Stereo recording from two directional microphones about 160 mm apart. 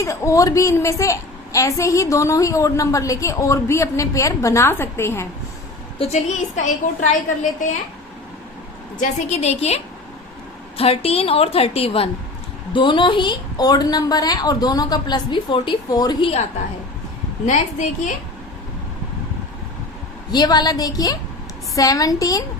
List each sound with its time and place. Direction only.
0.0 s a woman's voice: 20° left (ahead or behind)
6.0 s a woman's voice: 45° left (ahead or behind)
9.0 s a woman's voice: 45° left (ahead or behind); by 16.3 s 25° left (ahead or behind)
17.4 s a woman's voice: 50° left (ahead or behind)
20.3 s a woman's voice: 25° left (ahead or behind)